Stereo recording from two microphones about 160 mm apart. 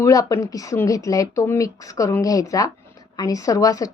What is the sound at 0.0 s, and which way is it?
Speech, 20° left (ahead or behind).